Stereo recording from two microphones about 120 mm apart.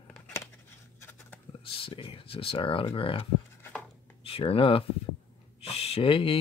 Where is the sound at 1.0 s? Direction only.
15° left (ahead or behind).